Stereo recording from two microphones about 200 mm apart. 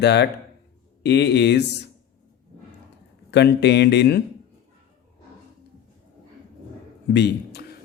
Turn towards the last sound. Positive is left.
turn(degrees=55)  # may be behind; listen again after turning